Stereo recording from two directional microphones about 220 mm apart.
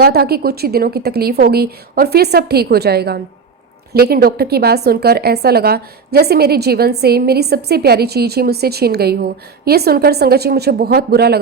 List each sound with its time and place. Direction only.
0.0 s a woman's voice: 45° right (ahead or behind)